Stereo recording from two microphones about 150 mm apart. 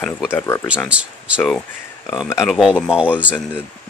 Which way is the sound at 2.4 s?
Centre (ahead or behind).